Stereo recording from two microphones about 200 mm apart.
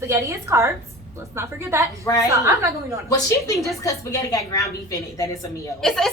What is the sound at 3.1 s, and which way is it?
A woman's voice, 15° left (ahead or behind).